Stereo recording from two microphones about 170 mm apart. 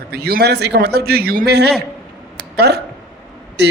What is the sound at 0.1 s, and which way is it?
A man's voice, 65° right (ahead or behind).